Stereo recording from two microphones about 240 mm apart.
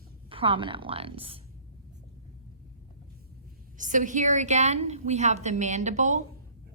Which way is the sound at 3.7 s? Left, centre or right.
Right.